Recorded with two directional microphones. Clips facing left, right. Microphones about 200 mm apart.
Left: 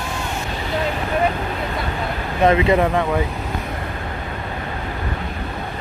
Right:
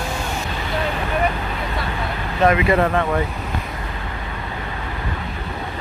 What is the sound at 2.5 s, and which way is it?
Speech, 25° left (ahead or behind).